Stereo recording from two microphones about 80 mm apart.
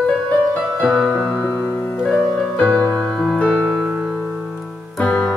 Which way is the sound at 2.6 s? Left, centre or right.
Centre.